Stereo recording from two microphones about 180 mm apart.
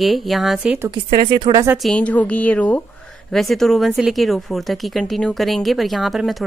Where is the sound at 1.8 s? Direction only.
5° left (ahead or behind).